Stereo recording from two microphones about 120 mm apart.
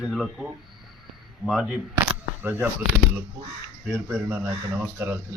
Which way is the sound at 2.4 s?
15° right (ahead or behind).